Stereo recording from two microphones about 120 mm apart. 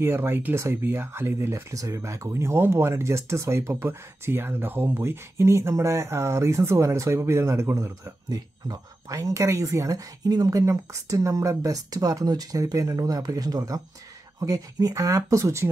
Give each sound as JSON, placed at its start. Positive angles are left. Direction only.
{"t": 0.0, "sound": "speech", "side_deg": -20}